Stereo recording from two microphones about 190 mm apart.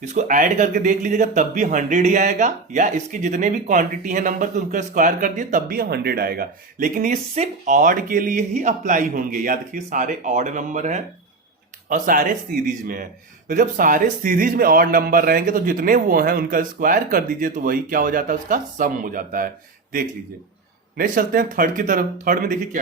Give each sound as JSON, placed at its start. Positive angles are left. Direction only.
{"t": 0.2, "sound": "speech", "side_deg": -45}
{"t": 21.0, "sound": "speech", "side_deg": -45}